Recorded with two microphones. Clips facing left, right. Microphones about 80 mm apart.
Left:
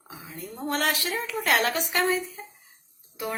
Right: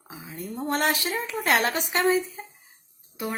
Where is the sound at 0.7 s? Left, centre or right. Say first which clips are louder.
Right 1 dB; right.